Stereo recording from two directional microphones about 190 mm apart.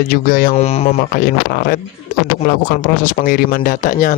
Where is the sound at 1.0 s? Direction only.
50° left (ahead or behind).